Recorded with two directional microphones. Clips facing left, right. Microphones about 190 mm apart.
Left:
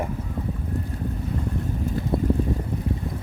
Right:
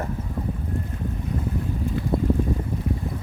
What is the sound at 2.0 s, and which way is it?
Boat, 40° left (ahead or behind).